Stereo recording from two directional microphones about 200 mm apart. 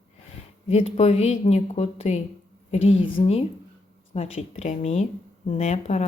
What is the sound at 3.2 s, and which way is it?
Speech, 30° left (ahead or behind).